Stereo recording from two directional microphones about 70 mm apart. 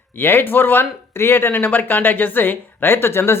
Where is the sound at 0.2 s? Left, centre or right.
Left.